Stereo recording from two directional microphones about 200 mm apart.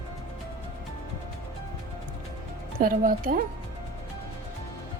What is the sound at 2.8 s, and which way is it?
Speech, 45° right (ahead or behind).